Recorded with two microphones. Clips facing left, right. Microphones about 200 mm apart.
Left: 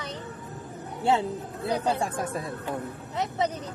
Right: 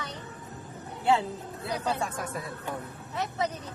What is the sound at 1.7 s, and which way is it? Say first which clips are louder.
Speech: left 4 dB; 30° left (ahead or behind).